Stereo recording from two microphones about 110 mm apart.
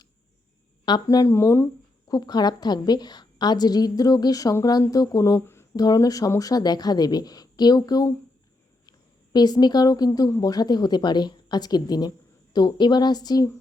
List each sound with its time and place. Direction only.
1.0 s speech: 30° left (ahead or behind)
2.0 s a woman's voice: 40° left (ahead or behind)
5.7 s a woman's voice: 35° left (ahead or behind)